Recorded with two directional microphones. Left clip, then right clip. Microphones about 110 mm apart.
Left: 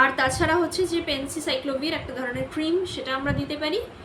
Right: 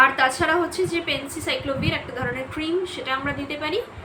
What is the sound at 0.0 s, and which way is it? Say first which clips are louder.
A woman's voice: right 3 dB; 30° left (ahead or behind).